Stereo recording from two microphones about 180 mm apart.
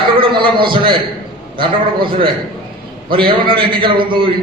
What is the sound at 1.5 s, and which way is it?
A man's voice, 25° right (ahead or behind).